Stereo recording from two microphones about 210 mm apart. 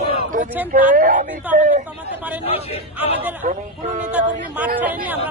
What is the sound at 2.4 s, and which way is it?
Speech, 25° left (ahead or behind).